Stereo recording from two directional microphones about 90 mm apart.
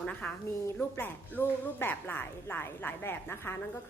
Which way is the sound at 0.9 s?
25° left (ahead or behind).